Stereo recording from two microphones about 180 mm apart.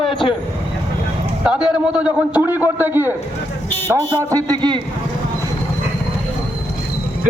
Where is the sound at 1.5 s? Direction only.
5° right (ahead or behind); by 4.8 s 25° right (ahead or behind).